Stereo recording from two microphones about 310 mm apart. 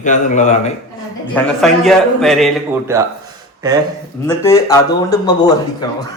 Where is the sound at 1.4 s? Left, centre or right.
Centre.